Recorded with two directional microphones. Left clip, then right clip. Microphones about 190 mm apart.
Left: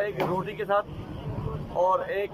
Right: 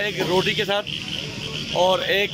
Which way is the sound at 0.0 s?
25° right (ahead or behind).